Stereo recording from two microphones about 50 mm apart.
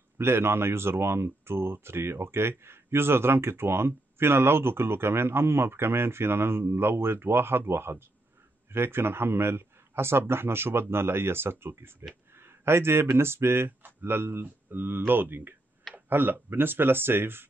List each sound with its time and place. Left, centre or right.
0.2 s speech: right